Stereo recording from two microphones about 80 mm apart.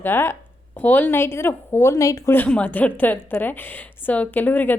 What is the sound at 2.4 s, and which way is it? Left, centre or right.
Speech, centre.